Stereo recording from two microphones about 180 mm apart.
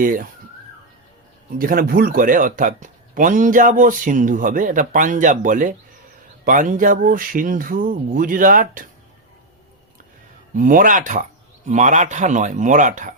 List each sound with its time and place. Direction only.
0.0 s speech: 50° right (ahead or behind)
1.5 s speech: 50° right (ahead or behind)
10.5 s speech: 45° right (ahead or behind)